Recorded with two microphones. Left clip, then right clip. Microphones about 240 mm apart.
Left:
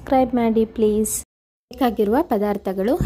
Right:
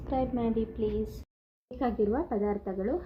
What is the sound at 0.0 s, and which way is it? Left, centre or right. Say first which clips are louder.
A woman's voice: left 13 dB; left.